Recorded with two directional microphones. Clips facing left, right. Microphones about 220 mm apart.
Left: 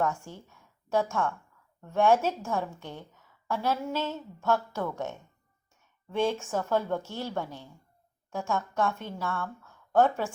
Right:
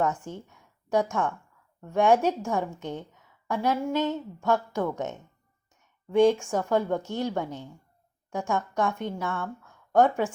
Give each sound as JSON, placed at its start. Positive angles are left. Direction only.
{"t": 0.0, "sound": "a woman's voice", "side_deg": -20}